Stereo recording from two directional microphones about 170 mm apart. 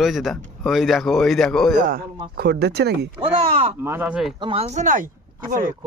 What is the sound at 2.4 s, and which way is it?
Speech, 75° right (ahead or behind).